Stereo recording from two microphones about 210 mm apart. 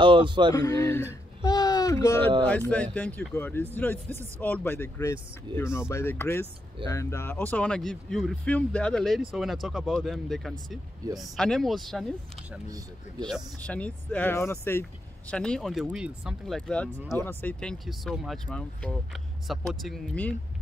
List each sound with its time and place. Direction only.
0.0 s speech: 25° right (ahead or behind)
0.6 s speech: 15° left (ahead or behind)
1.4 s a sound: 20° left (ahead or behind)
2.1 s speech: 25° right (ahead or behind)
2.4 s speech: 5° left (ahead or behind)
12.6 s speech: 15° right (ahead or behind)
13.3 s speech: 5° left (ahead or behind)